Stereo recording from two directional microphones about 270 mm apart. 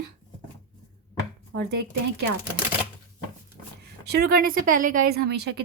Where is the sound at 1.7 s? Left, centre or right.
Right.